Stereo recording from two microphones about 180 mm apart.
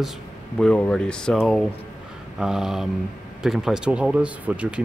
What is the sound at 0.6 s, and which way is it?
Speech, 5° left (ahead or behind).